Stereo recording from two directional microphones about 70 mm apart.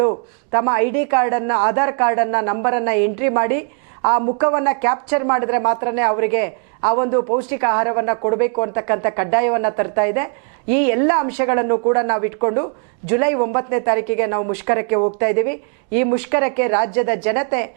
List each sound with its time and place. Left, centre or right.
0.0 s a man's voice: right